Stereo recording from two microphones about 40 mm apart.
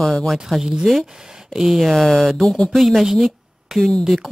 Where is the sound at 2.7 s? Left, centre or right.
Centre.